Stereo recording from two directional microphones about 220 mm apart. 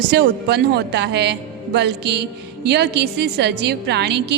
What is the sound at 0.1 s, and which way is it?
A woman's voice, 45° right (ahead or behind).